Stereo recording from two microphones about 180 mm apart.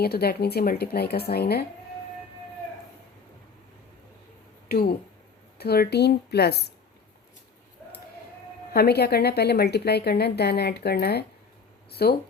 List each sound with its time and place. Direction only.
0.0 s a woman's voice: 60° left (ahead or behind)
4.7 s a woman's voice: 55° left (ahead or behind)
8.7 s a woman's voice: 60° left (ahead or behind)